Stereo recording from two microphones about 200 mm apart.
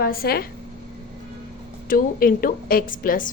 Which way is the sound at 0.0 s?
50° left (ahead or behind).